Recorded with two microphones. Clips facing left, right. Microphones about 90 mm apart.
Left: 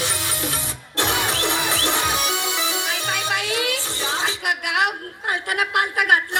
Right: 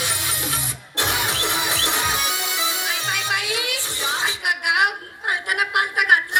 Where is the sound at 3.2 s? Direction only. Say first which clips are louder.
Left 2 dB; 20° right (ahead or behind).